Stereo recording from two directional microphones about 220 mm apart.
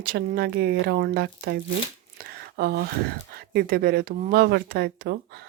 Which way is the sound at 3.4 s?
45° right (ahead or behind).